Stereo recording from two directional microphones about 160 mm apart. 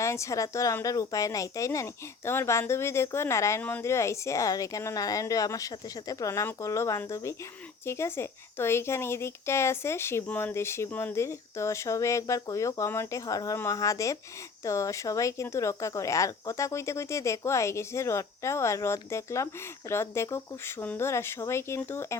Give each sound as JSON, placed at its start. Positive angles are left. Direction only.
{"t": 0.0, "sound": "a woman's voice", "side_deg": 20}